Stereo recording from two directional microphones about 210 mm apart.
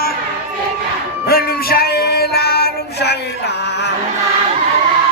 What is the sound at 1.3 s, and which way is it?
Music, 45° left (ahead or behind).